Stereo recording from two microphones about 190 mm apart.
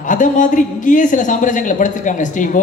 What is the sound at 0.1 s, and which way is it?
A man's voice, 40° left (ahead or behind).